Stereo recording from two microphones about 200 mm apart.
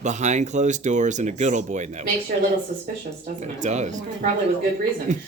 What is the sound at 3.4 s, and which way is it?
Speech, 35° right (ahead or behind).